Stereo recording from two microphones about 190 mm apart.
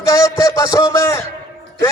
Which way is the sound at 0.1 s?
15° left (ahead or behind).